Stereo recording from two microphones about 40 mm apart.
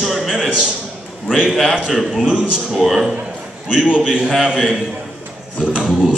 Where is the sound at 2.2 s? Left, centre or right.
Right.